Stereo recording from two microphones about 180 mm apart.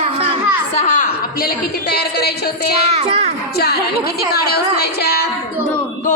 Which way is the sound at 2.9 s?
35° right (ahead or behind).